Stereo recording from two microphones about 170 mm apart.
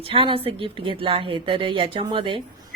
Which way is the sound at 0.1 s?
30° right (ahead or behind).